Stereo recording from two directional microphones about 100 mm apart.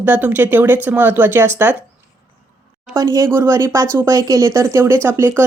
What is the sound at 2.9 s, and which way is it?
Speech, 35° right (ahead or behind).